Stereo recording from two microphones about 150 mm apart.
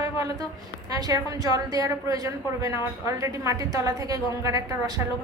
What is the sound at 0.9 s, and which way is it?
A woman's voice, 25° right (ahead or behind).